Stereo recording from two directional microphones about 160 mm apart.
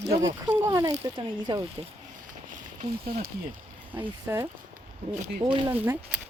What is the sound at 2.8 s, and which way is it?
Speech, 65° right (ahead or behind).